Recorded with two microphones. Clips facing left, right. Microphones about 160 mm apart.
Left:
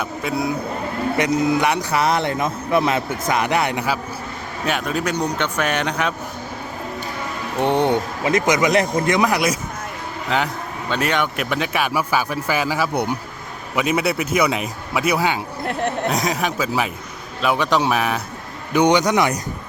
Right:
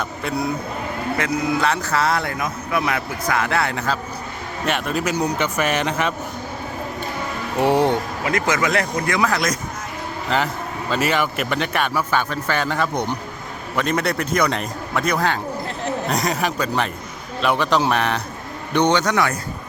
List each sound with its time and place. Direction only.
0.0 s a man's voice: centre (ahead or behind)
1.1 s speech: 20° left (ahead or behind)
4.6 s a man's voice: centre (ahead or behind)
7.6 s a man's voice: 5° right (ahead or behind)
8.2 s speech: 20° left (ahead or behind)
10.2 s a man's voice: centre (ahead or behind); by 19.4 s 15° left (ahead or behind)